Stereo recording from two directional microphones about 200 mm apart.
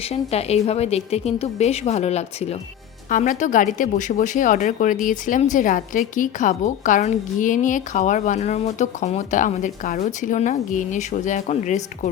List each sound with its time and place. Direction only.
0.0 s speech: 30° left (ahead or behind)